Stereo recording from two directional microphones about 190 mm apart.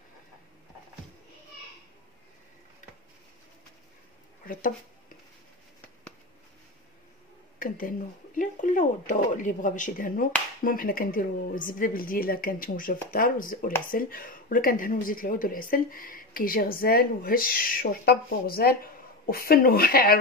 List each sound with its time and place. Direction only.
4.5 s speech: 45° left (ahead or behind)
7.5 s speech: 45° left (ahead or behind)